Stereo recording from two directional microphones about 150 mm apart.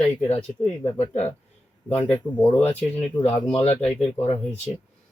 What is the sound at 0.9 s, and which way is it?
Speech, 45° left (ahead or behind).